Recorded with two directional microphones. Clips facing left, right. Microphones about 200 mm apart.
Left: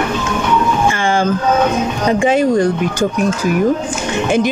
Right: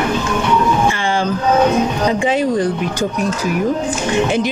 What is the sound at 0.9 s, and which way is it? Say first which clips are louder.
Vehicle: left 2 dB; 45° left (ahead or behind).